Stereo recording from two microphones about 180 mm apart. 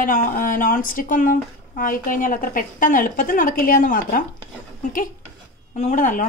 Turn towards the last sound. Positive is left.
turn(degrees=45)  # may be behind; listen again after turning